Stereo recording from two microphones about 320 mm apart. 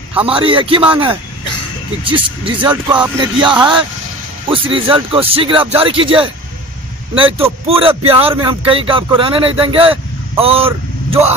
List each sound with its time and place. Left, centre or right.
0.3 s speech: centre
2.0 s speech: centre